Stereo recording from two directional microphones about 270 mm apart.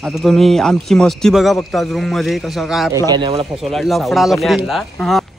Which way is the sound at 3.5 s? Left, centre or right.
Centre.